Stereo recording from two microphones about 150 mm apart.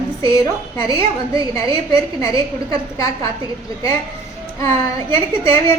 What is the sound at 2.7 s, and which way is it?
Speech, 20° left (ahead or behind).